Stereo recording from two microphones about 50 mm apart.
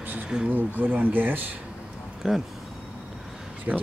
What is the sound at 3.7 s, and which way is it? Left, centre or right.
Speech, right.